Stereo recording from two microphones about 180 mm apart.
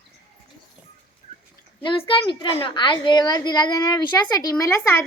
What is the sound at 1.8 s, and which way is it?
A woman's voice, 30° left (ahead or behind).